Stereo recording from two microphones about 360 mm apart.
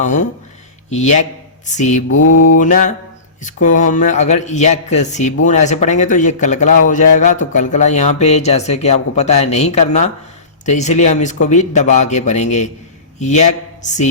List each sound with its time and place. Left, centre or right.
0.0 s a man's voice: centre